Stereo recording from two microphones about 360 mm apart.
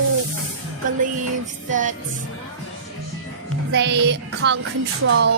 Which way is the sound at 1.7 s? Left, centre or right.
Right.